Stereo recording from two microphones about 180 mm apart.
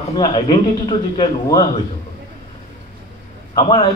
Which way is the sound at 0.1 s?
25° left (ahead or behind).